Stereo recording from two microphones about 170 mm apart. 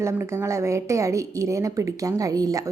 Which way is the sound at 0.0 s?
15° right (ahead or behind).